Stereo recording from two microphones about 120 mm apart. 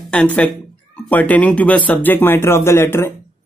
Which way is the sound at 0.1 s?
10° left (ahead or behind).